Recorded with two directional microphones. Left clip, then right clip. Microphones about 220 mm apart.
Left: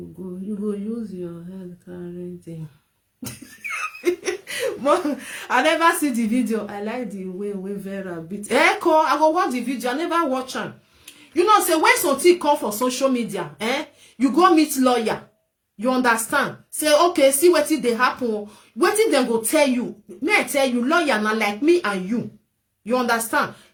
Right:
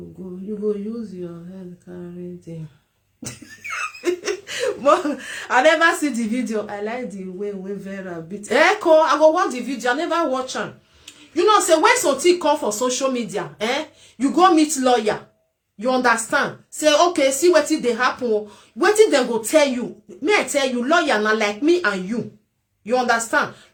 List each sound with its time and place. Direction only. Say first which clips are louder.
3.2 s speech: even; centre (ahead or behind)